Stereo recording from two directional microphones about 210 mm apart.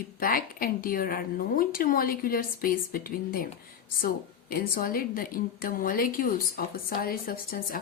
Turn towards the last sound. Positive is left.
turn(degrees=45)  # may be behind; listen again after turning